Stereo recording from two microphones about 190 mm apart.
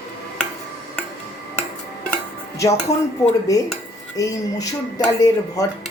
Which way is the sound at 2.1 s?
15° left (ahead or behind).